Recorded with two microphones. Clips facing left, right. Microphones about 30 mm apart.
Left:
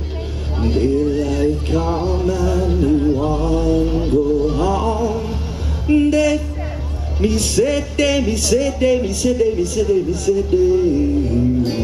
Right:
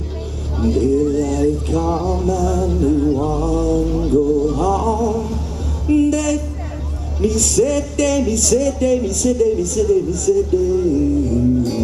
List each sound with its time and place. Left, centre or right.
0.6 s music: left
7.2 s speech: left